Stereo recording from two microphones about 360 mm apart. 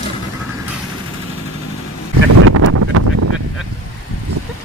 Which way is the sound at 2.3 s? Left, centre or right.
Right.